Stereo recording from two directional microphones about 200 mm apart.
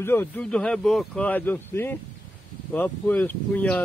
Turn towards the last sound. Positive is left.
turn(degrees=10)  # may be behind; listen again after turning